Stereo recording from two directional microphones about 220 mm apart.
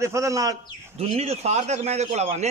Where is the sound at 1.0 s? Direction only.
30° right (ahead or behind).